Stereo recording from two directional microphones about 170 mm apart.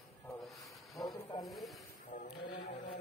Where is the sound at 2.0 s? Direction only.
55° left (ahead or behind).